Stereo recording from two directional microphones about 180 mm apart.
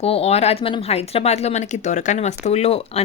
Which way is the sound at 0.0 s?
35° left (ahead or behind).